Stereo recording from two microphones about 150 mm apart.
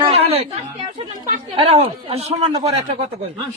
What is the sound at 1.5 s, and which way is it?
Speech, 40° right (ahead or behind).